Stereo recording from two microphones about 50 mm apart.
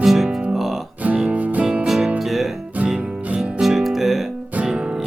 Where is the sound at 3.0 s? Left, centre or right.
Right.